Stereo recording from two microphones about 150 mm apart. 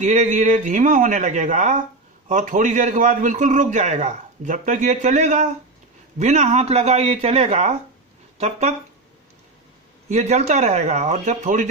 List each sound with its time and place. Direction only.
0.0 s a man's voice: 55° right (ahead or behind)
10.0 s speech: 50° right (ahead or behind)